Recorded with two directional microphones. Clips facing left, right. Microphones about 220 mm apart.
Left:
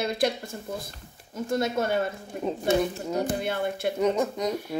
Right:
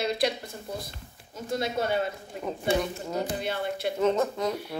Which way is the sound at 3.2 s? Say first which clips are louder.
Left 3 dB; 50° left (ahead or behind).